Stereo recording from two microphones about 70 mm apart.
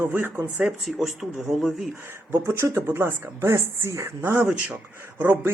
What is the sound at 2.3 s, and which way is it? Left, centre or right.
Speech, right.